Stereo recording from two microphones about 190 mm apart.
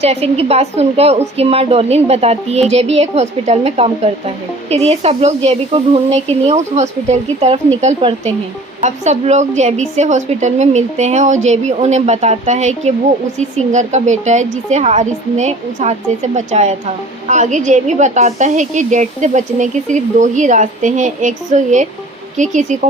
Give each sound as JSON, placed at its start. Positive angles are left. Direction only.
{"t": 0.0, "sound": "a woman's voice", "side_deg": -35}